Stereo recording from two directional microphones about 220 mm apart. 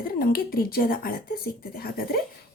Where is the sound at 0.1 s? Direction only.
40° left (ahead or behind).